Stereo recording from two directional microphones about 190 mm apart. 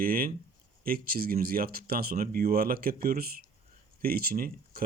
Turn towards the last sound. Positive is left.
turn(degrees=-50)  # may be behind; listen again after turning